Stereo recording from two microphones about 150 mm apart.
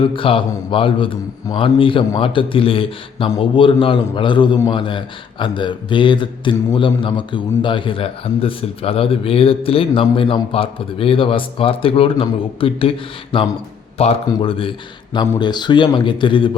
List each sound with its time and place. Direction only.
0.0 s a man's voice: 35° left (ahead or behind)
14.0 s a man's voice: 45° left (ahead or behind)